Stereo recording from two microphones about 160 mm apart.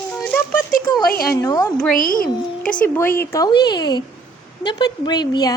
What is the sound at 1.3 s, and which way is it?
Speech, 25° left (ahead or behind).